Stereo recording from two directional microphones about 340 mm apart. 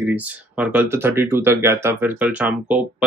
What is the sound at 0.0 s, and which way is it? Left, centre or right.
Speech, centre.